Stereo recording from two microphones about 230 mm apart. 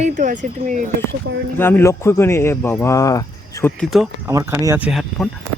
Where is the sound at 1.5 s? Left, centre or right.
Centre.